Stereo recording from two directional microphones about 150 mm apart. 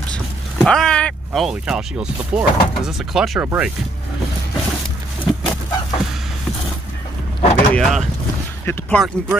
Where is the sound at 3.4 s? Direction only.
15° right (ahead or behind).